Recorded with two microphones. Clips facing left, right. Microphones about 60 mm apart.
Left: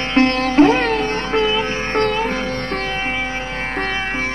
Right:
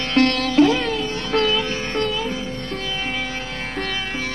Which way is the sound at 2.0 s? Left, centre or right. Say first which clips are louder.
Left 6 dB; left.